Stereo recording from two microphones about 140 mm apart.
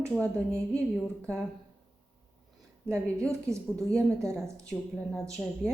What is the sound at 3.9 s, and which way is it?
Speech, 5° left (ahead or behind).